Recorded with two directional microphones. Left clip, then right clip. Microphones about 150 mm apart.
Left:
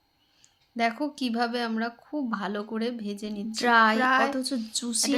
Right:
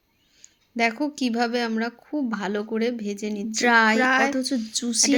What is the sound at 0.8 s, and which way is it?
Speech, 15° right (ahead or behind).